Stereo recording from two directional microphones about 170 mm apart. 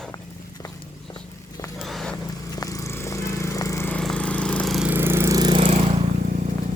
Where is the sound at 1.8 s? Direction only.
Centre (ahead or behind).